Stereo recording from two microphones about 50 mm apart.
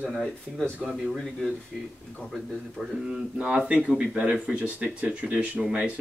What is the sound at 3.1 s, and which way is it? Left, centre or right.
Speech, centre.